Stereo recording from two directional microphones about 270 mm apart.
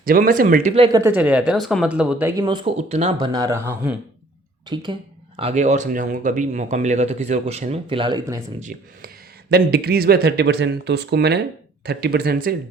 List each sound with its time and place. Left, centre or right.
0.0 s speech: right
1.0 s speech: centre
9.5 s speech: right